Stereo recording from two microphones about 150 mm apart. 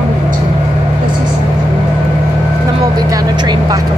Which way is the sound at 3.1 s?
25° right (ahead or behind).